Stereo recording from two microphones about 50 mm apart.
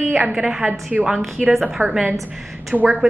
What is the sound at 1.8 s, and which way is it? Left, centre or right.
Speech, left.